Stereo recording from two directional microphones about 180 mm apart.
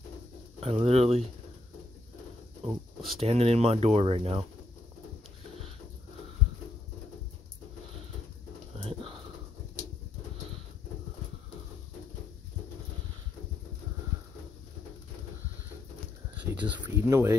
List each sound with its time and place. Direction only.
0.6 s speech: 35° right (ahead or behind)
2.6 s speech: centre (ahead or behind)
3.2 s speech: 35° right (ahead or behind)
8.7 s pigeon: 30° right (ahead or behind)
16.5 s a sound: 10° right (ahead or behind)